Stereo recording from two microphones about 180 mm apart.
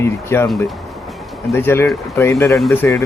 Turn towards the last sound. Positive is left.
turn(degrees=10)  # may be behind; listen again after turning